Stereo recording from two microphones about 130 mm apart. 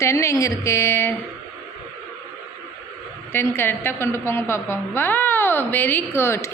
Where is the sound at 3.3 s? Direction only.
15° left (ahead or behind).